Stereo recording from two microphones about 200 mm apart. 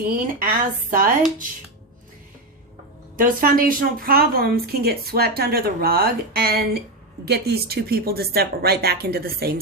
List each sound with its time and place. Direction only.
0.1 s speech: 45° right (ahead or behind)
3.2 s speech: 45° right (ahead or behind)